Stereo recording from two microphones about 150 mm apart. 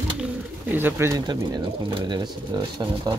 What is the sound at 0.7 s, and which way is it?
Speech, 15° right (ahead or behind).